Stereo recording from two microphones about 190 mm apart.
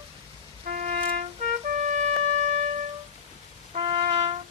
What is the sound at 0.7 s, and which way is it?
Music, 45° right (ahead or behind).